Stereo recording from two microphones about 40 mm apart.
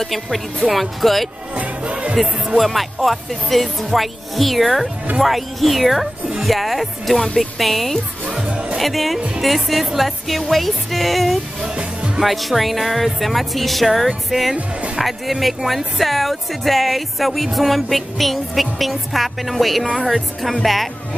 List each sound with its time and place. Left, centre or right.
0.0 s speech: centre
1.5 s music: right
2.1 s speech: centre